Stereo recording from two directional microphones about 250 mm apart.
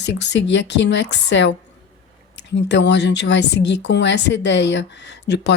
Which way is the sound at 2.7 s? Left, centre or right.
Left.